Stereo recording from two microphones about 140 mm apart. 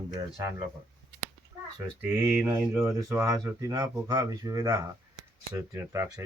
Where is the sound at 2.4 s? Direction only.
20° right (ahead or behind).